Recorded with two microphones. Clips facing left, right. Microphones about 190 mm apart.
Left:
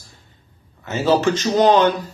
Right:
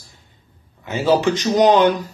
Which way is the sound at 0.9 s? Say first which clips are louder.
Even; 15° right (ahead or behind).